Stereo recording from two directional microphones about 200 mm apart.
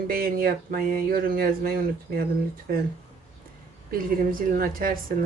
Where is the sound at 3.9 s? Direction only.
45° right (ahead or behind).